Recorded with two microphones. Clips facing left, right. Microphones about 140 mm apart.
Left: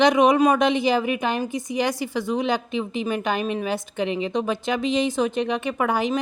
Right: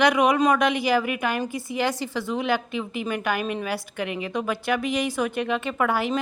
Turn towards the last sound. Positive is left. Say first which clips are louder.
# left 1 dB
turn(degrees=20)  # may be behind; listen again after turning